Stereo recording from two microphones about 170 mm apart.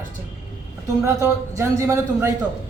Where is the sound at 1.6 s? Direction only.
15° right (ahead or behind).